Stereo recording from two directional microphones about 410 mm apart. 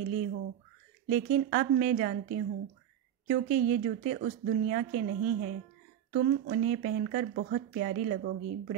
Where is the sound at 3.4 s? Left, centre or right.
Right.